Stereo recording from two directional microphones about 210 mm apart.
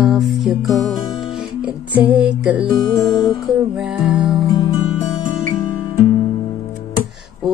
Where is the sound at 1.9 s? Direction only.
5° right (ahead or behind).